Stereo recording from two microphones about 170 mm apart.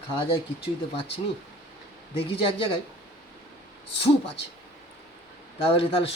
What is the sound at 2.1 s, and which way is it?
Speech, 30° left (ahead or behind).